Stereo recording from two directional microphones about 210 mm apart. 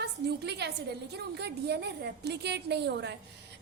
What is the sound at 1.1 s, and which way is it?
A woman's voice, 50° right (ahead or behind).